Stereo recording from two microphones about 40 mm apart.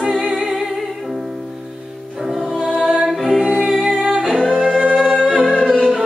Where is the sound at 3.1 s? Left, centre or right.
Centre.